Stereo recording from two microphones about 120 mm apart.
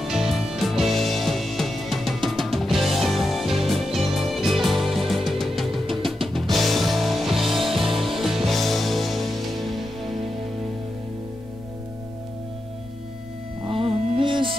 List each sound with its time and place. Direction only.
0.0 s music: 5° right (ahead or behind)
13.7 s music: 50° right (ahead or behind)